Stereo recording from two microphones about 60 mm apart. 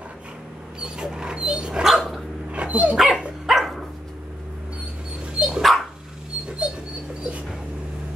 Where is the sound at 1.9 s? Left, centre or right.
Centre.